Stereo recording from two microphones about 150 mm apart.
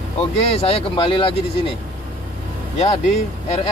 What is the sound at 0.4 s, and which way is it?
Speech, 40° left (ahead or behind).